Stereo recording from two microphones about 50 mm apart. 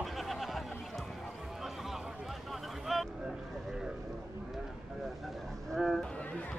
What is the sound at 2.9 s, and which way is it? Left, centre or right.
Vehicle, centre.